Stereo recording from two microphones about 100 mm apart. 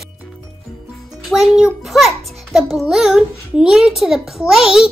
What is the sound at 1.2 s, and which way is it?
Music, 5° right (ahead or behind).